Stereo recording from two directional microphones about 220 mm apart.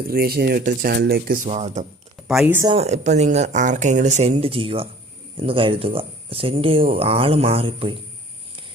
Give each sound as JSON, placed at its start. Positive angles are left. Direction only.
{"t": 0.1, "sound": "speech", "side_deg": -45}
{"t": 2.2, "sound": "speech", "side_deg": -5}
{"t": 2.7, "sound": "speech", "side_deg": -30}